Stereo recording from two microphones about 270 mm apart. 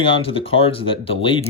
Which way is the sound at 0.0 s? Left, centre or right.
Centre.